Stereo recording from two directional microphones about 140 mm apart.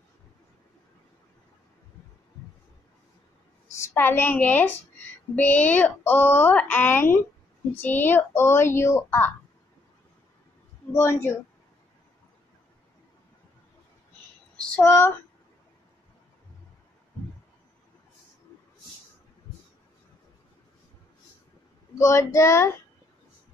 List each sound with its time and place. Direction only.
3.7 s a woman's voice: 20° left (ahead or behind)
10.9 s a woman's voice: 20° left (ahead or behind)
14.8 s speech: 20° left (ahead or behind)
21.9 s speech: 20° left (ahead or behind)